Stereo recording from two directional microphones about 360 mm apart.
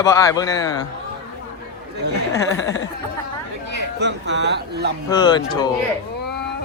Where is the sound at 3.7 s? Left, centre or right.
Right.